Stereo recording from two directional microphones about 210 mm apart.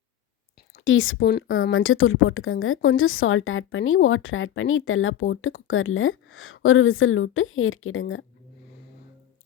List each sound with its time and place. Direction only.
0.9 s a woman's voice: 65° left (ahead or behind)
1.2 s a woman's voice: 50° left (ahead or behind)
1.7 s a woman's voice: 75° left (ahead or behind)